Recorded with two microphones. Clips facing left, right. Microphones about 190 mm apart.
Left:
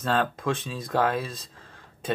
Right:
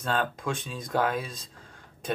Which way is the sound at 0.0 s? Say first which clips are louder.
Left 3 dB; centre (ahead or behind).